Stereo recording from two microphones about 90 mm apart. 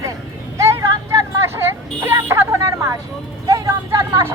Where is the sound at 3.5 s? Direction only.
35° right (ahead or behind).